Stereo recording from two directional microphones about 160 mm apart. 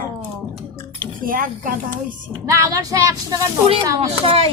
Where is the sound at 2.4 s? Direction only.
20° right (ahead or behind).